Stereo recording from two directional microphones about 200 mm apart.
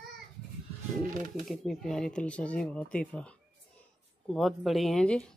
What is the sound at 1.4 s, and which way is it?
Speech, centre (ahead or behind).